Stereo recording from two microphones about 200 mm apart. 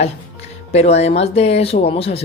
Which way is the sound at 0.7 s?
35° left (ahead or behind).